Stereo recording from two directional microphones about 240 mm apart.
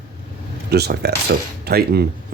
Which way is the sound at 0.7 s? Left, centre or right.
Right.